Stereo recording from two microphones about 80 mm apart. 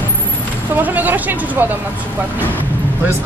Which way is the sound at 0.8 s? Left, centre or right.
Right.